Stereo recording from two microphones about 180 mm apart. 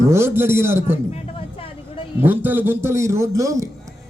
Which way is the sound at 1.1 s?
35° left (ahead or behind).